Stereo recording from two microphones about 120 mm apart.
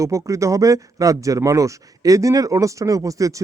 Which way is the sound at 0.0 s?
25° right (ahead or behind).